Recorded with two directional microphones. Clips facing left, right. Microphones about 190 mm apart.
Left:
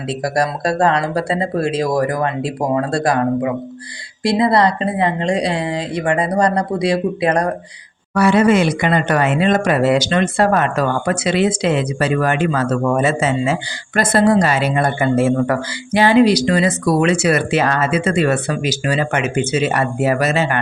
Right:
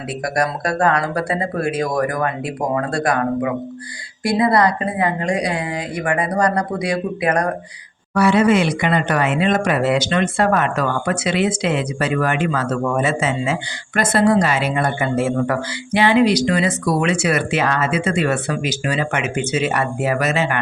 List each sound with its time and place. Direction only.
0.3 s speech: 30° left (ahead or behind)
8.1 s speech: 45° left (ahead or behind)